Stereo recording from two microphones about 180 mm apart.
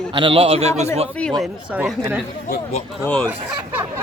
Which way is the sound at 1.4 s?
5° right (ahead or behind).